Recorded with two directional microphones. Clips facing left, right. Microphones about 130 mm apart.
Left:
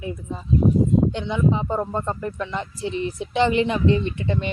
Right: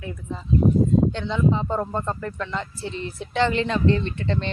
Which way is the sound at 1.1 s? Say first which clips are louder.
Left 1 dB; 15° left (ahead or behind).